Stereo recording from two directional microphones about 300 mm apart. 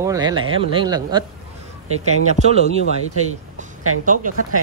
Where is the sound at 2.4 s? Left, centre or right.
Right.